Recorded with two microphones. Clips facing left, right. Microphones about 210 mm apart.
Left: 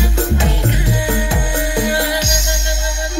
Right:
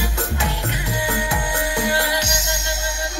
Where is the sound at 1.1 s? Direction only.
30° left (ahead or behind).